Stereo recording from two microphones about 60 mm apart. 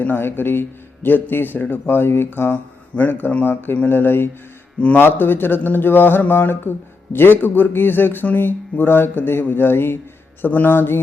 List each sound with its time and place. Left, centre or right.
0.0 s speech: left
2.5 s speech: left